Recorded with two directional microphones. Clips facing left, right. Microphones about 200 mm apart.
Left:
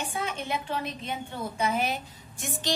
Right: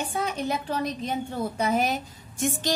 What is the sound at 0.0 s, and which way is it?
A woman's voice, 40° right (ahead or behind).